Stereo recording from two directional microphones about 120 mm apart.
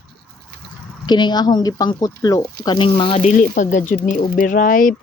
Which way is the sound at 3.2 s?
85° left.